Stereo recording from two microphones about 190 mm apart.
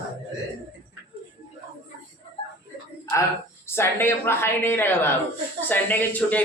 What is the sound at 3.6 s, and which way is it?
Speech, 10° left (ahead or behind).